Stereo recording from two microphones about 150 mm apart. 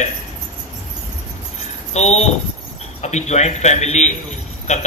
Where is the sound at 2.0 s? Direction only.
45° left (ahead or behind).